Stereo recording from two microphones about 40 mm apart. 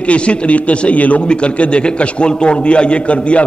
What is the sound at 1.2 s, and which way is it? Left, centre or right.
A man's voice, left.